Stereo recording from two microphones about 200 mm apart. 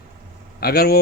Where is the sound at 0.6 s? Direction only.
50° left (ahead or behind).